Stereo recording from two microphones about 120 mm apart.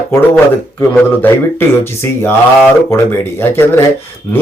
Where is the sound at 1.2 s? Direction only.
20° left (ahead or behind).